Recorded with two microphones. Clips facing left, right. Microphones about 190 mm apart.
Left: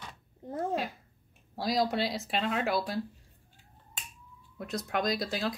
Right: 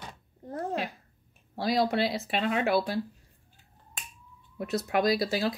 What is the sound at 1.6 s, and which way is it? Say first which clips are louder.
Speech: right 3 dB; centre (ahead or behind).